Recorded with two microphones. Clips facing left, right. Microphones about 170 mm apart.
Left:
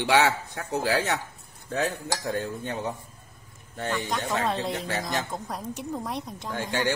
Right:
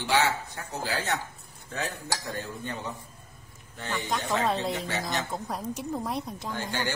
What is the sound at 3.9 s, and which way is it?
Speech, centre (ahead or behind).